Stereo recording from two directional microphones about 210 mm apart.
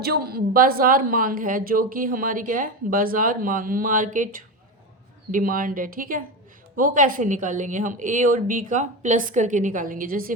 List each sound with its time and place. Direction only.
0.0 s a woman's voice: 50° right (ahead or behind)